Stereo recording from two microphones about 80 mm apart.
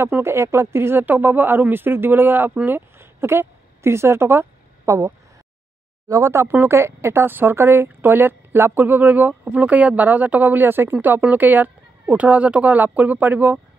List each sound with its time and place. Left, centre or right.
0.0 s speech: right